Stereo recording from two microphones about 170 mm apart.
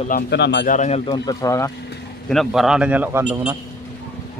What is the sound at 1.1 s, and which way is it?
Speech, 20° left (ahead or behind).